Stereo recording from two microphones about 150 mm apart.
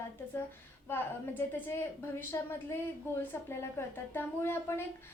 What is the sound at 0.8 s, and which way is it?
A woman's voice, 15° left (ahead or behind).